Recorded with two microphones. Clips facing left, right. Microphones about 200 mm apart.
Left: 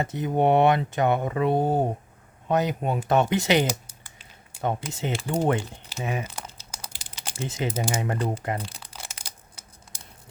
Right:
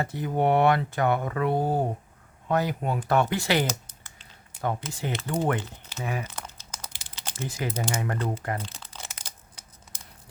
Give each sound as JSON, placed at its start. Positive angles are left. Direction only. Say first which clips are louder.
{"t": 0.0, "sound": "speech", "louder": "left 2 dB", "side_deg": 20}
{"t": 6.8, "sound": "typing", "louder": "left 1 dB", "side_deg": 10}
{"t": 7.4, "sound": "speech", "louder": "left 3 dB", "side_deg": 25}
{"t": 7.7, "sound": "speech", "louder": "left 2 dB", "side_deg": 10}
{"t": 7.9, "sound": "crumpling", "louder": "left 2 dB", "side_deg": 20}